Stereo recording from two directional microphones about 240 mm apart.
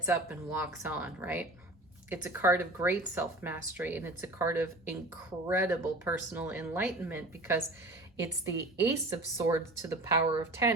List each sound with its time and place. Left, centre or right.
0.0 s speech: centre